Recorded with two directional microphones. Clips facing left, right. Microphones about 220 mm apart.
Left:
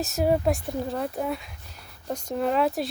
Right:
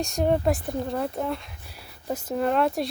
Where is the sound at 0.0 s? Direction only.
5° left (ahead or behind).